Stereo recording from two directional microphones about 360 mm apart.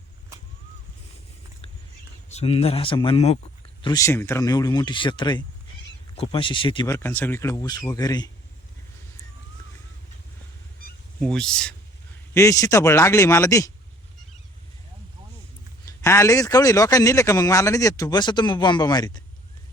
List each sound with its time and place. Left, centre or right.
2.3 s a man's voice: centre
11.2 s a man's voice: centre
15.9 s a man's voice: centre